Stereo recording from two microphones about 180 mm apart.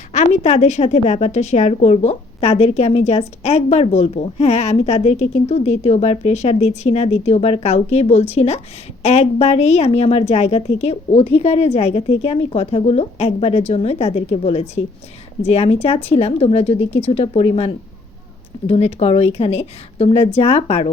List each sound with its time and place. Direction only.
0.1 s a woman's voice: 35° left (ahead or behind)
18.7 s a woman's voice: 35° left (ahead or behind)